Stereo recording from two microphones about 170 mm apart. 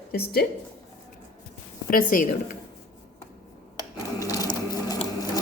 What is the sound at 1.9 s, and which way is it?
Speech, 55° left (ahead or behind).